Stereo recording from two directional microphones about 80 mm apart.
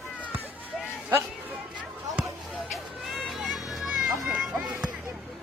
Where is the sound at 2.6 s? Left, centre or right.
Centre.